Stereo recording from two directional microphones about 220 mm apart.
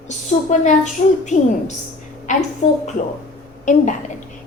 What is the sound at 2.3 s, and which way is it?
Speech, 35° left (ahead or behind).